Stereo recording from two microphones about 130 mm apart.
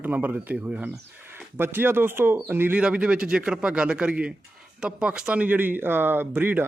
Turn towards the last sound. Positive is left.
turn(degrees=-15)  # may be behind; listen again after turning